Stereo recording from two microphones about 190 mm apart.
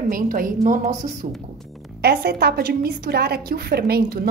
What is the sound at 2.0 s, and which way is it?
A woman's voice, 55° right (ahead or behind).